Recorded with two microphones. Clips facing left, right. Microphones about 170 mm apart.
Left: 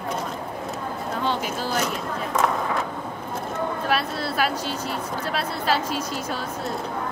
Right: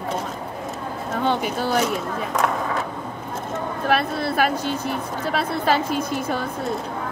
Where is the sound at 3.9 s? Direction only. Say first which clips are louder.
Right 8 dB; 50° right (ahead or behind).